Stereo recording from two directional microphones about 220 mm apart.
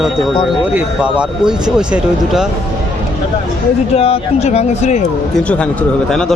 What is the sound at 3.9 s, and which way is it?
Speech, 25° left (ahead or behind).